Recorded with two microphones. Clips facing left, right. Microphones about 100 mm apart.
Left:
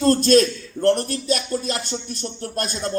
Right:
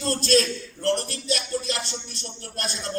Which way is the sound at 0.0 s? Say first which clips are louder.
Left 7 dB; 45° left (ahead or behind).